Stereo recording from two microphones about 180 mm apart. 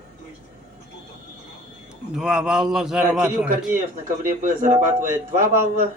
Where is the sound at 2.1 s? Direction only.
5° right (ahead or behind).